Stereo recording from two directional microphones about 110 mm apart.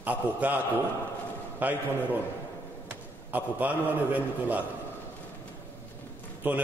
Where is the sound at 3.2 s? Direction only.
15° right (ahead or behind).